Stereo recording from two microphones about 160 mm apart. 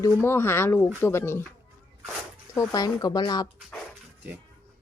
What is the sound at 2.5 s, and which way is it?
Speech, 25° left (ahead or behind).